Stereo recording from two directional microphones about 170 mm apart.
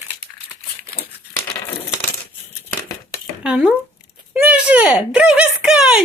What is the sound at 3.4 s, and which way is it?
Speech, 5° right (ahead or behind).